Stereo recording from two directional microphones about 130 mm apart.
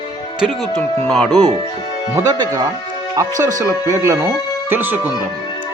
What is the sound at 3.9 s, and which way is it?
Speech, 20° right (ahead or behind).